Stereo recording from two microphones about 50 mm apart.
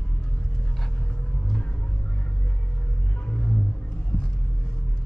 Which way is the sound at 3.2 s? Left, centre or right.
Centre.